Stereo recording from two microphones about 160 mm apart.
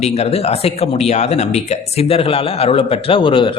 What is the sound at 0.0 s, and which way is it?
Speech, 40° left (ahead or behind).